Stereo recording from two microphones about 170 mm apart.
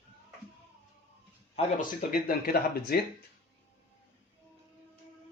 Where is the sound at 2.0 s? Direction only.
60° left (ahead or behind).